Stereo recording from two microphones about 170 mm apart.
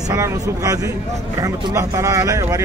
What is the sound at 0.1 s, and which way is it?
Speech, 20° right (ahead or behind).